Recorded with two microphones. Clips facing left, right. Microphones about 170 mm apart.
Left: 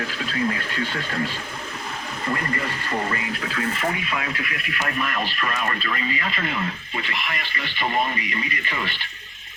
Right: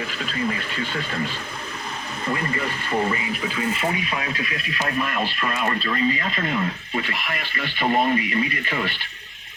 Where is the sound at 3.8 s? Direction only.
25° right (ahead or behind).